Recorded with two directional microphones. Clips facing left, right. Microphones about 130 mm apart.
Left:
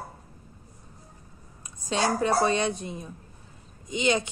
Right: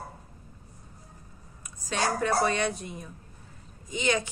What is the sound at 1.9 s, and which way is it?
A woman's voice, 25° left (ahead or behind).